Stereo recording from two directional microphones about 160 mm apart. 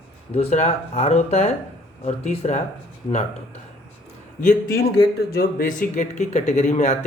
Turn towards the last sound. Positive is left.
turn(degrees=45)  # may be behind; listen again after turning